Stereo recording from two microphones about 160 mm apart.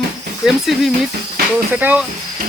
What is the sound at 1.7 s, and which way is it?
Speech, 10° right (ahead or behind).